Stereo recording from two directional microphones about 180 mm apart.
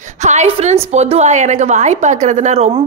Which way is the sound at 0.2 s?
40° right (ahead or behind).